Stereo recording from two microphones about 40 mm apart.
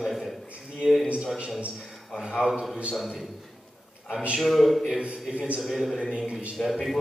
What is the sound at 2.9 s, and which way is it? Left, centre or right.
Speech, centre.